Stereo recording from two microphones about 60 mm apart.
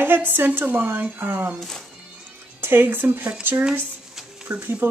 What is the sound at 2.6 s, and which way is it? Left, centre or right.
Speech, right.